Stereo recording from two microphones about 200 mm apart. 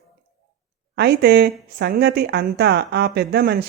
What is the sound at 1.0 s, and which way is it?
A woman's voice, 55° right (ahead or behind).